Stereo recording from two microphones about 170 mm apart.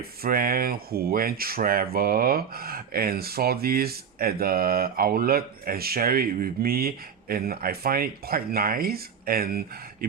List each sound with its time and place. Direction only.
0.2 s speech: 60° right (ahead or behind)